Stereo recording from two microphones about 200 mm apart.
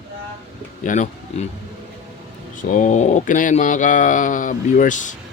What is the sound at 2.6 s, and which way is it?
Pigeon, 40° left (ahead or behind).